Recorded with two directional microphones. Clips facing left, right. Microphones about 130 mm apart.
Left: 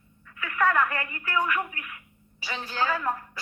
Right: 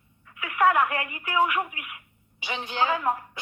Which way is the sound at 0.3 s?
15° right (ahead or behind).